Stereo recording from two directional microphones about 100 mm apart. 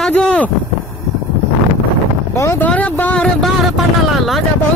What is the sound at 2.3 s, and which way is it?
Vehicle, 30° left (ahead or behind).